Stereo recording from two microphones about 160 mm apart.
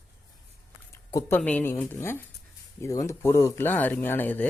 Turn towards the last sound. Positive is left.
turn(degrees=10)  # may be behind; listen again after turning